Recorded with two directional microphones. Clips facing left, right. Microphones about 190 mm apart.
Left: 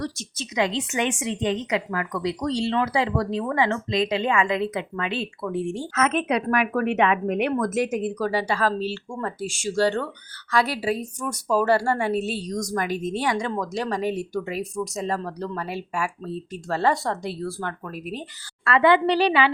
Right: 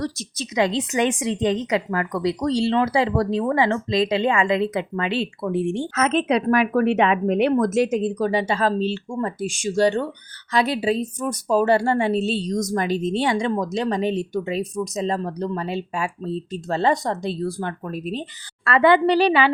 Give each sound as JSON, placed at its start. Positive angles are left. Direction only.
{"t": 0.0, "sound": "a woman's voice", "side_deg": -35}
{"t": 18.6, "sound": "a woman's voice", "side_deg": -40}